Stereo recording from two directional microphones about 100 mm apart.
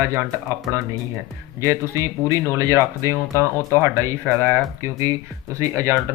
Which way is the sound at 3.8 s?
30° right (ahead or behind).